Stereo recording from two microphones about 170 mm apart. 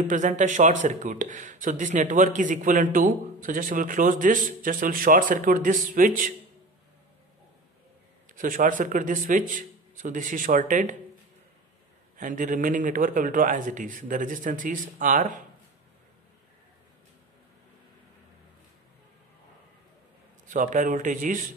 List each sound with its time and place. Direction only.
0.0 s speech: 45° right (ahead or behind)
8.4 s speech: 50° right (ahead or behind)
12.2 s speech: 50° right (ahead or behind)
20.4 s speech: 50° right (ahead or behind)